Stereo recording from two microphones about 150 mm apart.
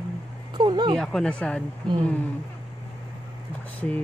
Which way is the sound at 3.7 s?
10° left (ahead or behind).